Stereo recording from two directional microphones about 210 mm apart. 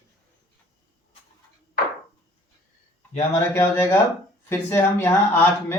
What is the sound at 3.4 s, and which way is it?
Speech, 10° left (ahead or behind).